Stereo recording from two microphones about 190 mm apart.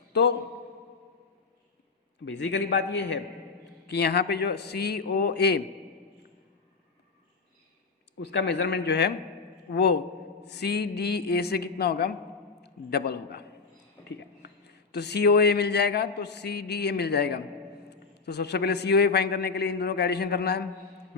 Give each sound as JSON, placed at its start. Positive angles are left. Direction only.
{"t": 0.1, "sound": "a man's voice", "side_deg": 65}
{"t": 2.2, "sound": "a man's voice", "side_deg": 65}
{"t": 8.2, "sound": "a man's voice", "side_deg": 65}
{"t": 14.4, "sound": "a man's voice", "side_deg": 60}